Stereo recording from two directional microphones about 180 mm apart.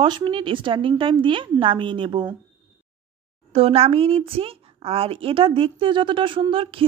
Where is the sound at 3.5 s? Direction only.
35° right (ahead or behind).